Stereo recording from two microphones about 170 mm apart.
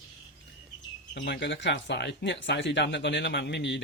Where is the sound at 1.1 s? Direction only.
90° left.